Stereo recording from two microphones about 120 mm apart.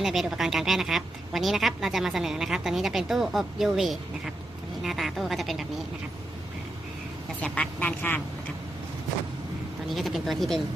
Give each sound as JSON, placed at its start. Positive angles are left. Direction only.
{"t": 0.0, "sound": "a woman's voice", "side_deg": -5}
{"t": 7.3, "sound": "speech", "side_deg": 10}
{"t": 9.9, "sound": "a woman's voice", "side_deg": 0}